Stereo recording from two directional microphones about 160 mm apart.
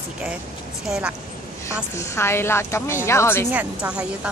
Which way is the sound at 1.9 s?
15° left (ahead or behind).